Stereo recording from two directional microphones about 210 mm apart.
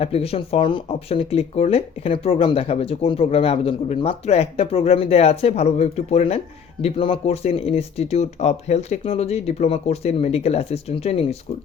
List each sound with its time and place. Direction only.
0.0 s speech: 30° left (ahead or behind)